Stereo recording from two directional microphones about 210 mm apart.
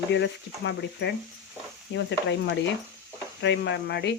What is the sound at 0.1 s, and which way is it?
Speech, 55° left (ahead or behind).